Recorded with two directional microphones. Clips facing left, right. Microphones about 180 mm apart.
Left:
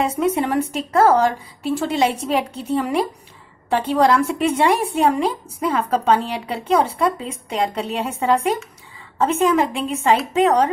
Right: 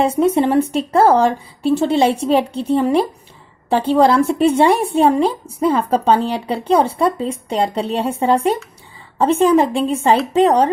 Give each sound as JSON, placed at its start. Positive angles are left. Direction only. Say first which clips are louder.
{"t": 0.0, "sound": "a woman's voice", "louder": "right 5 dB", "side_deg": -30}